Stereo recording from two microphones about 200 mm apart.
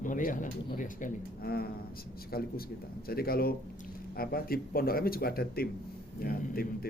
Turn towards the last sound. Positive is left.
turn(degrees=50)  # may be behind; listen again after turning